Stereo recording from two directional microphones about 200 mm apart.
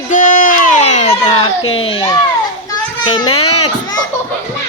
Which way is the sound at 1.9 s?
25° left (ahead or behind).